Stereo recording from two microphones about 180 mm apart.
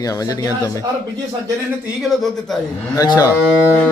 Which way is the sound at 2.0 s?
Centre (ahead or behind).